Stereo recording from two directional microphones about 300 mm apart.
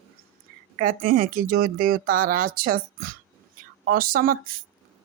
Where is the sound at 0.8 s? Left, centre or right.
Right.